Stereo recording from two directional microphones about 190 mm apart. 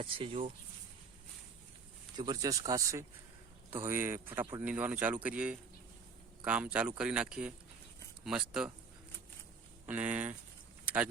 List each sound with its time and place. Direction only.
0.0 s speech: 30° right (ahead or behind)
2.1 s speech: 20° right (ahead or behind); by 8.7 s 5° right (ahead or behind)
9.8 s speech: 10° right (ahead or behind)